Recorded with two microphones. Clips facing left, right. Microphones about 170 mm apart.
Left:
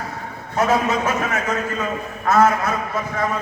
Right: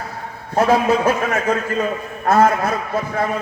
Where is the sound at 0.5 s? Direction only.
35° right (ahead or behind).